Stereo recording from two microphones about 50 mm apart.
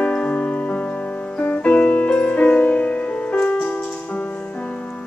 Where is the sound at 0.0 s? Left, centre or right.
Left.